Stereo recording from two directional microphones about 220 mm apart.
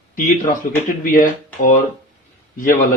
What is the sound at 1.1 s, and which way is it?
Speech, 35° left (ahead or behind).